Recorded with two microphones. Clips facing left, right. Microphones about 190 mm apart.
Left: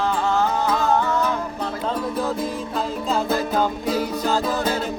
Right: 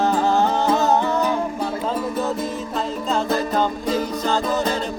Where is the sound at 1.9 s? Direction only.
Centre (ahead or behind).